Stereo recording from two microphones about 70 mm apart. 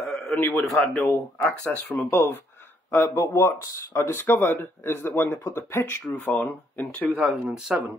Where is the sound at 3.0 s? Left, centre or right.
Left.